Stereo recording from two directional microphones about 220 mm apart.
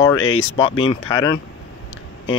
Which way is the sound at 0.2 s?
65° left (ahead or behind).